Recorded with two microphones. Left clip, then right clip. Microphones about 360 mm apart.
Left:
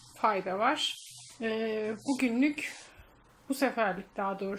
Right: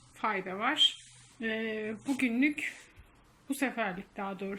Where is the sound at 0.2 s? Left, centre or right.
Centre.